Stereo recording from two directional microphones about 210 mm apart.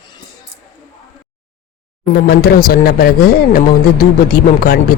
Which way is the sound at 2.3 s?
45° left (ahead or behind).